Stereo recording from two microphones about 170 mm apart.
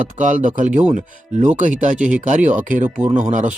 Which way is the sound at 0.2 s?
50° right (ahead or behind).